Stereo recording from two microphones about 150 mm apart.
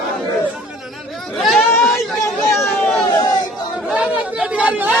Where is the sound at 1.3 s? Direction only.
Centre (ahead or behind).